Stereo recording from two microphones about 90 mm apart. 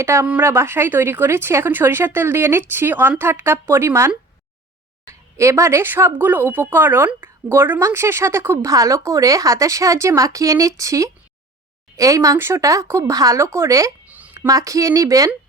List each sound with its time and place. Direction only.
0.0 s speech: 30° right (ahead or behind)
5.4 s speech: 35° right (ahead or behind)
8.5 s speech: 40° right (ahead or behind)